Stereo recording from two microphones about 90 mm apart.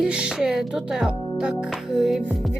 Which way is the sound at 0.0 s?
10° right (ahead or behind).